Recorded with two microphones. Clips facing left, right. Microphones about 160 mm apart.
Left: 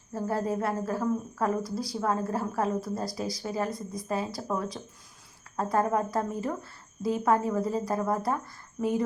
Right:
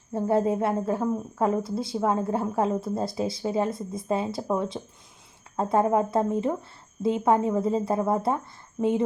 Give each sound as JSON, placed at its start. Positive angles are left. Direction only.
{"t": 0.1, "sound": "a woman's voice", "side_deg": -25}